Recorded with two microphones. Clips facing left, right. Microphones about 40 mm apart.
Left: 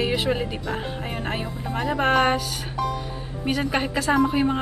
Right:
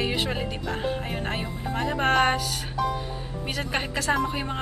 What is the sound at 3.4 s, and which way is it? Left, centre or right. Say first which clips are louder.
Speech: left 6 dB; centre.